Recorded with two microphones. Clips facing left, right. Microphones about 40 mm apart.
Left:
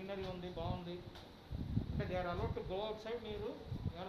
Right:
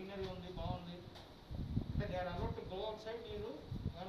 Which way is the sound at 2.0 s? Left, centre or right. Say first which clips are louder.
Left 2 dB; left.